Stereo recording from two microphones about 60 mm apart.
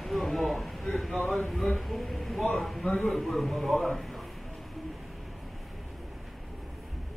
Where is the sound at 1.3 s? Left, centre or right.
Centre.